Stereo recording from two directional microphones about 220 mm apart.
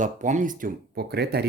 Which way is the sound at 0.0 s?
35° right (ahead or behind).